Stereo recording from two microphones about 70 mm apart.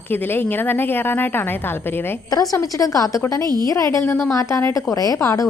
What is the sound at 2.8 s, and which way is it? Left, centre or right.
A woman's voice, left.